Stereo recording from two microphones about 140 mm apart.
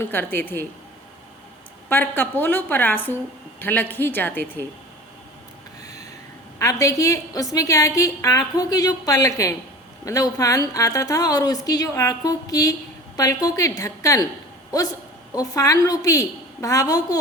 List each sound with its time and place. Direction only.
0.0 s a woman's voice: 15° left (ahead or behind)
1.9 s a woman's voice: 15° left (ahead or behind)
6.6 s a woman's voice: 20° left (ahead or behind)
15.3 s a woman's voice: 25° left (ahead or behind)